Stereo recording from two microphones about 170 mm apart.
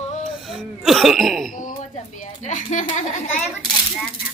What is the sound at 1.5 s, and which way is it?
A woman's voice, 50° left (ahead or behind).